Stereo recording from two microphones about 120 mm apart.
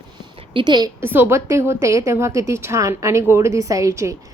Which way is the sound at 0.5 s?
40° right (ahead or behind).